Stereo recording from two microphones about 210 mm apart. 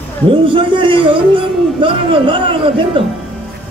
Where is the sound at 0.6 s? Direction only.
25° right (ahead or behind).